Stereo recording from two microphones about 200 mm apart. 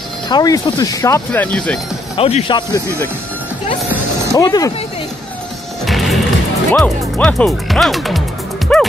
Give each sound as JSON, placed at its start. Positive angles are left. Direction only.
{"t": 0.3, "sound": "speech", "side_deg": 20}
{"t": 2.1, "sound": "speech", "side_deg": 30}
{"t": 4.4, "sound": "speech", "side_deg": 20}
{"t": 5.9, "sound": "music", "side_deg": 0}
{"t": 6.7, "sound": "speech", "side_deg": 5}
{"t": 8.7, "sound": "music", "side_deg": 5}